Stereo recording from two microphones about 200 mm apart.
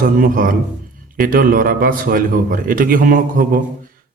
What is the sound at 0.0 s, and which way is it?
A man's voice, 45° right (ahead or behind).